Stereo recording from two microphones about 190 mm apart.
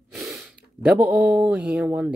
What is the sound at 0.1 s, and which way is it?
Speech, centre (ahead or behind).